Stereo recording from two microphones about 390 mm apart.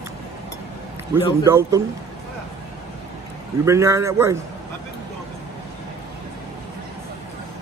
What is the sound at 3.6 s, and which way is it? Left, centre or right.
Speech, centre.